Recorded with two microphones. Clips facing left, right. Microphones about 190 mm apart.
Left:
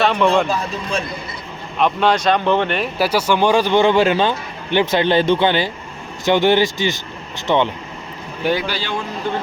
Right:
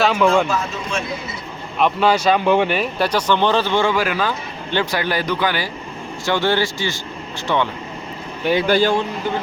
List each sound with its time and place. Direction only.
0.0 s speech: centre (ahead or behind)
0.4 s speech: 35° left (ahead or behind)
1.8 s speech: centre (ahead or behind); by 7.7 s 20° left (ahead or behind)
8.6 s a man's voice: 50° right (ahead or behind)